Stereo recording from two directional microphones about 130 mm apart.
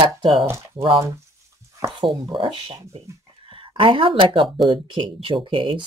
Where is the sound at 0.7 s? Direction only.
45° right (ahead or behind).